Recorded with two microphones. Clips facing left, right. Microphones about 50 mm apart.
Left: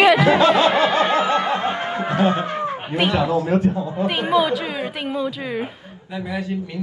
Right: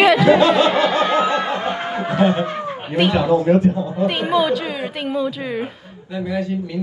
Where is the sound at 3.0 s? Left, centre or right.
Centre.